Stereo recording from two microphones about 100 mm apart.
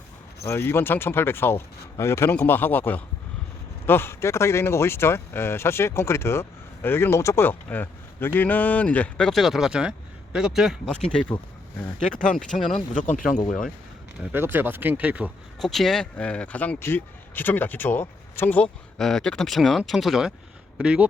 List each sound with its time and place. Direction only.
0.4 s speech: 25° left (ahead or behind); by 10.9 s 5° right (ahead or behind)
11.0 s speech: 10° left (ahead or behind)
14.3 s speech: 20° right (ahead or behind)
15.6 s speech: centre (ahead or behind); by 18.7 s 20° left (ahead or behind)
18.9 s speech: 5° left (ahead or behind)